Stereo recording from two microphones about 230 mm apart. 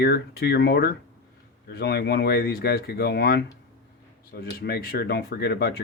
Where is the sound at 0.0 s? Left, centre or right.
Left.